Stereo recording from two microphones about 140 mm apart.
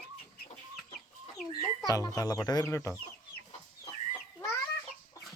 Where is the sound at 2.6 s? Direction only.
15° left (ahead or behind).